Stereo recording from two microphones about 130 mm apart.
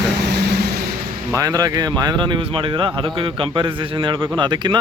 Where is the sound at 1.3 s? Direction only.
30° right (ahead or behind).